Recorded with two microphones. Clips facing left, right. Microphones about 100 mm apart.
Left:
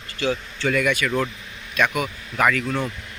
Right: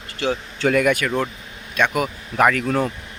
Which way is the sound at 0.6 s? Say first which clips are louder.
Right 4 dB; 45° right (ahead or behind).